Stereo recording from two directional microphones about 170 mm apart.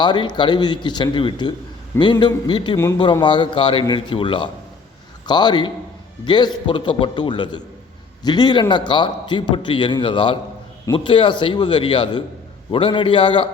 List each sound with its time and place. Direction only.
0.0 s a man's voice: 25° left (ahead or behind)